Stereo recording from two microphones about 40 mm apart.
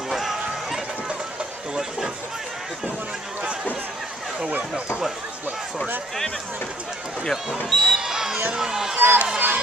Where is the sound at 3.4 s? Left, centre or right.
Right.